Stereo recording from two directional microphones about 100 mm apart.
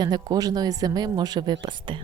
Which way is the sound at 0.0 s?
40° right (ahead or behind).